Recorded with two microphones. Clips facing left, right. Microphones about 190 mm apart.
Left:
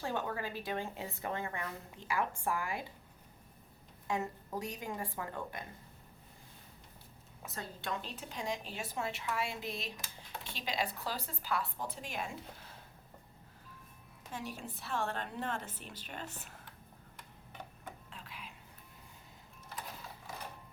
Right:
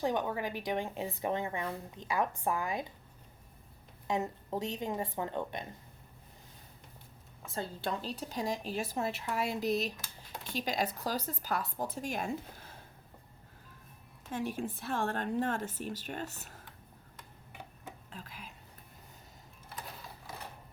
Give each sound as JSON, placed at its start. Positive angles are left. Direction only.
{"t": 0.0, "sound": "speech", "side_deg": -15}
{"t": 4.0, "sound": "a woman's voice", "side_deg": -20}
{"t": 7.5, "sound": "a woman's voice", "side_deg": -30}
{"t": 14.3, "sound": "a woman's voice", "side_deg": -50}
{"t": 17.5, "sound": "tick-tock", "side_deg": -10}
{"t": 18.1, "sound": "a sound", "side_deg": -40}